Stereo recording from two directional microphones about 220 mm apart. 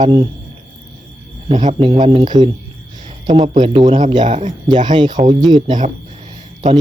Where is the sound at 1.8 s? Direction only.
25° right (ahead or behind).